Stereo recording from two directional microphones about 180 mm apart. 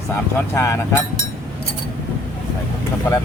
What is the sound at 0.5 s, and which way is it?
Speech, 15° left (ahead or behind).